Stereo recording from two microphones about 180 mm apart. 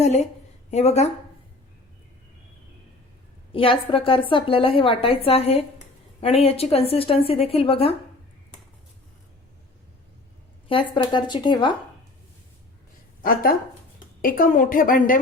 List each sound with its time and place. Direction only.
0.0 s a woman's voice: 35° left (ahead or behind)
3.5 s a woman's voice: 30° left (ahead or behind)
10.7 s speech: 25° left (ahead or behind)
13.2 s a woman's voice: 55° left (ahead or behind)